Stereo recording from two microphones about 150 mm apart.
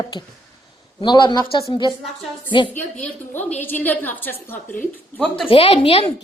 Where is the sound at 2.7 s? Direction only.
10° left (ahead or behind).